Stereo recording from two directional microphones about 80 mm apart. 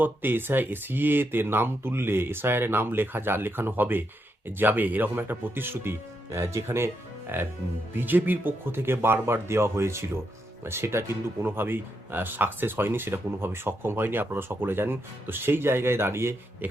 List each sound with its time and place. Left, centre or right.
0.0 s speech: right